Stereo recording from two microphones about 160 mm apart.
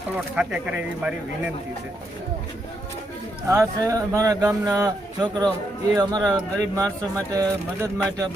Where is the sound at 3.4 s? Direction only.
20° right (ahead or behind).